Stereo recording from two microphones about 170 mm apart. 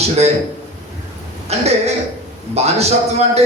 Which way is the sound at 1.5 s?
40° right (ahead or behind).